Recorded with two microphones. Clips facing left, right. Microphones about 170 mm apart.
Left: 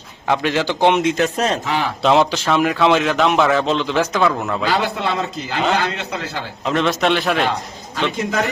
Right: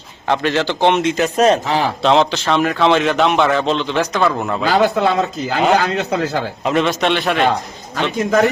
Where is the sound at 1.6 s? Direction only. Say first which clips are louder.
Right 3 dB; 35° right (ahead or behind).